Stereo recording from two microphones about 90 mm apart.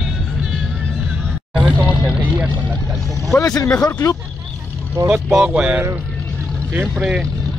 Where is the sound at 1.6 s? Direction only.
15° right (ahead or behind).